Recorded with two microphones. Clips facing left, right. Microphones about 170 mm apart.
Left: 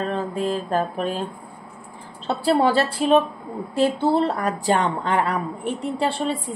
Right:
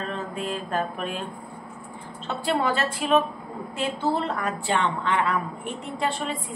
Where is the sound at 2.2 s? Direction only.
35° left (ahead or behind).